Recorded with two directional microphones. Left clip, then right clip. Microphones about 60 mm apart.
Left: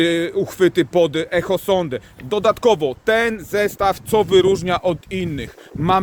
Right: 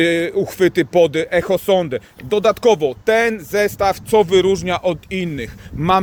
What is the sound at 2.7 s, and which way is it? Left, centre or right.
Speech, left.